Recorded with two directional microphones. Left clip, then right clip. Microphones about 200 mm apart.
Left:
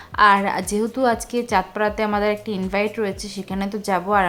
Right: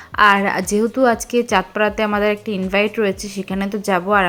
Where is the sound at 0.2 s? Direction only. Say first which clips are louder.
Right 2 dB; 15° right (ahead or behind).